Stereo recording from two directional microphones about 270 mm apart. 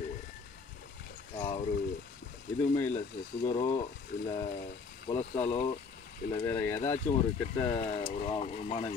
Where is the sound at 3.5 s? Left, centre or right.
Left.